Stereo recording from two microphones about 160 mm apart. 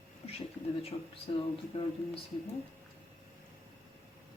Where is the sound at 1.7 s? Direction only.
40° left (ahead or behind).